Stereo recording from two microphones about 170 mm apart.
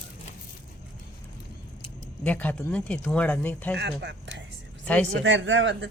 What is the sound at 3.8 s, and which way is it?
Speech, 90° right.